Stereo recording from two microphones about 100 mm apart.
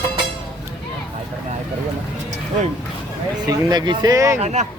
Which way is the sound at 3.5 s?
45° right (ahead or behind).